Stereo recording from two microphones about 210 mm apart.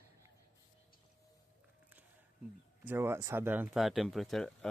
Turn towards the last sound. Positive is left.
turn(degrees=0)  # may be behind; listen again after turning